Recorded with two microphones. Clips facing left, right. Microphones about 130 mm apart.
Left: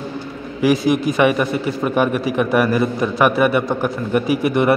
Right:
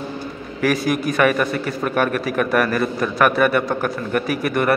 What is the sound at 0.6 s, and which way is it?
A man's voice, 15° left (ahead or behind).